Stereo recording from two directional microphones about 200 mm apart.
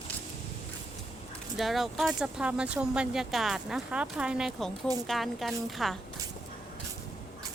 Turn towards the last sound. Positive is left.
turn(degrees=0)  # may be behind; listen again after turning